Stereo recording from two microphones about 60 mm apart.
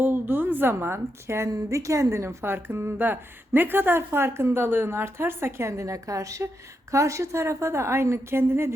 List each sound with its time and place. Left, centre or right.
0.0 s a woman's voice: right
1.5 s a woman's voice: right